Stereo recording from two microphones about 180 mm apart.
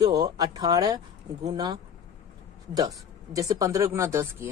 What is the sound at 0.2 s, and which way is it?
Speech, 20° right (ahead or behind).